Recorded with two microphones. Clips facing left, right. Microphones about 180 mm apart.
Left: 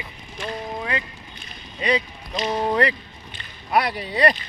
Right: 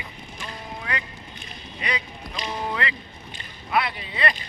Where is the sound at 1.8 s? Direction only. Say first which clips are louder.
Left 8 dB; 30° left (ahead or behind).